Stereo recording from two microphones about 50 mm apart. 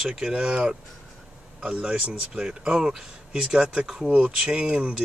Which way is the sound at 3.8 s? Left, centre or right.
Centre.